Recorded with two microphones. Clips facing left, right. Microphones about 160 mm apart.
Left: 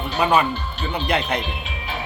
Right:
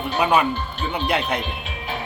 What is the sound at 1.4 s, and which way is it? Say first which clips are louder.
Music: even; 50° right (ahead or behind).